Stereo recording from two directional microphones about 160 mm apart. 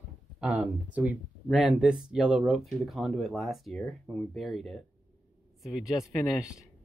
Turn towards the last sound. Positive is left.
turn(degrees=-5)  # may be behind; listen again after turning